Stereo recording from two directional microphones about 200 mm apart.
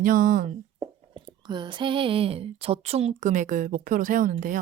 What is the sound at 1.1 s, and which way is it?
Speech, 20° right (ahead or behind).